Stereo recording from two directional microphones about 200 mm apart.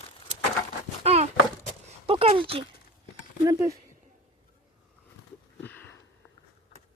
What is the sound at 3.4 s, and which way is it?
Speech, 15° right (ahead or behind).